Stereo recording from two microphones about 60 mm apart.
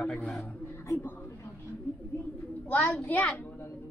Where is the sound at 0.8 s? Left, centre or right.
Left.